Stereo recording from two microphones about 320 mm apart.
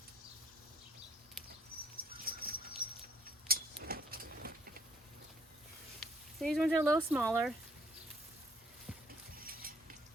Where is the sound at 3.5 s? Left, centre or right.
Right.